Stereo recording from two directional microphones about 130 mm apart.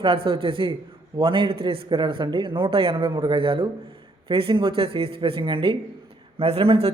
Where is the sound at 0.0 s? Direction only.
40° right (ahead or behind).